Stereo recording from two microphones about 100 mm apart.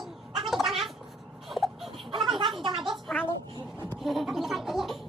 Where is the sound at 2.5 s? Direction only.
50° right (ahead or behind).